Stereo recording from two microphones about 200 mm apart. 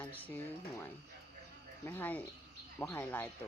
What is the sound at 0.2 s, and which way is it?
Speech, 10° left (ahead or behind).